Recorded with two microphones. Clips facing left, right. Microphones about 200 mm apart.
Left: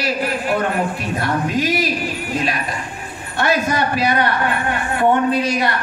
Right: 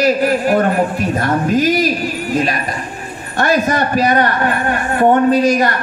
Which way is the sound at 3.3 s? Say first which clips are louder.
Right 4 dB; 45° right (ahead or behind).